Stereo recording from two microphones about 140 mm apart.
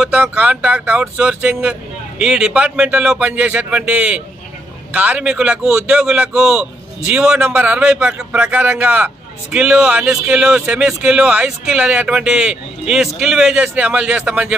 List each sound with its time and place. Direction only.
0.0 s a man's voice: 10° right (ahead or behind)